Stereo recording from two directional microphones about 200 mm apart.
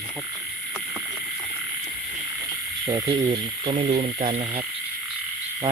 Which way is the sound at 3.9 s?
40° right (ahead or behind).